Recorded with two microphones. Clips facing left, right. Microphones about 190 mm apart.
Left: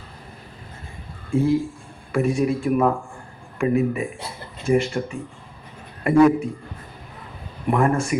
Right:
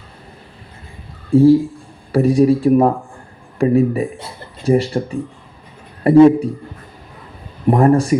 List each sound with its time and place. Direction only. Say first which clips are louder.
1.3 s speech: right 10 dB; 35° right (ahead or behind)
7.7 s speech: right 7 dB; 35° right (ahead or behind)